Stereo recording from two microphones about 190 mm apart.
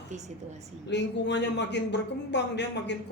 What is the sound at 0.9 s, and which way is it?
Speech, 65° left (ahead or behind).